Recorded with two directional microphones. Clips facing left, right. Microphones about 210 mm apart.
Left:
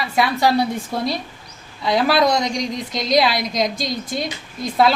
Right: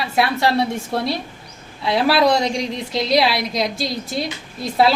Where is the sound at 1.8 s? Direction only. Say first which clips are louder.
Even; 5° right (ahead or behind).